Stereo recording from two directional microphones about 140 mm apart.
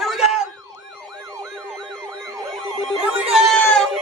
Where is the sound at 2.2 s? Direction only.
25° right (ahead or behind).